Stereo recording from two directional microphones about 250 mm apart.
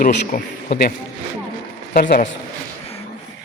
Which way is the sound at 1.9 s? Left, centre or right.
Left.